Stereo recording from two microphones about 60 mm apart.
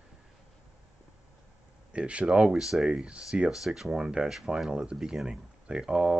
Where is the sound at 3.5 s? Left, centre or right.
Centre.